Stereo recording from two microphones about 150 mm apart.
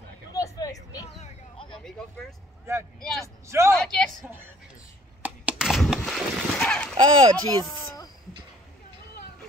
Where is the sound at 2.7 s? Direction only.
15° right (ahead or behind).